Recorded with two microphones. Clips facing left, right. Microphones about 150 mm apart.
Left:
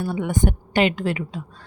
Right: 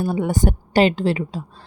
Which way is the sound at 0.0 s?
35° right (ahead or behind).